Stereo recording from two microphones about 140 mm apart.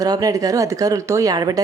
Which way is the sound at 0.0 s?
25° right (ahead or behind).